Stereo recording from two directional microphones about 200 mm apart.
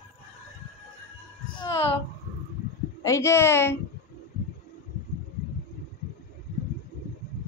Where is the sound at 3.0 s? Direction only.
15° left (ahead or behind).